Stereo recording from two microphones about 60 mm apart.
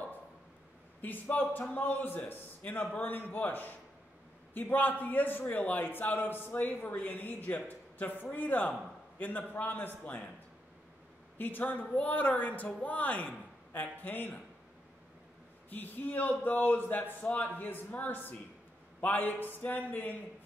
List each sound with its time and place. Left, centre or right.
1.0 s a man's voice: left
11.3 s a man's voice: left
15.7 s a man's voice: left